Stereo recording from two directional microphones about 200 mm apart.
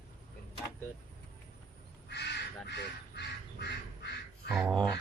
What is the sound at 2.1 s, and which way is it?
Crow, 55° left (ahead or behind).